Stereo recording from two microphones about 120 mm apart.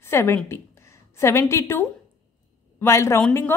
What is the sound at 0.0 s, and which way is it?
A woman's voice, 20° left (ahead or behind).